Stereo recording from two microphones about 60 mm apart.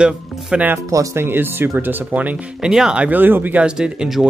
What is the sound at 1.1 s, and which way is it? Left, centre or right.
A man's voice, right.